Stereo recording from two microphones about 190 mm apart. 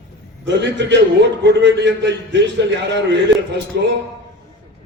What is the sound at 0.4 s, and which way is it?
A man's voice, 70° right (ahead or behind).